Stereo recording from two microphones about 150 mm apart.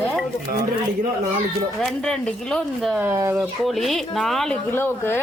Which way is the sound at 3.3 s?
Centre (ahead or behind).